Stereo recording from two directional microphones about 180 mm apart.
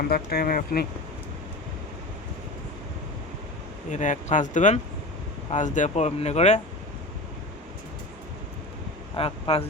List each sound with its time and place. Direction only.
0.1 s speech: 60° left (ahead or behind)
3.9 s speech: 40° left (ahead or behind)
9.1 s speech: 35° left (ahead or behind)